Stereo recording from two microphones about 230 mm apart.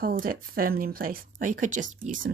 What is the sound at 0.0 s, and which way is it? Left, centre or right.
Speech, right.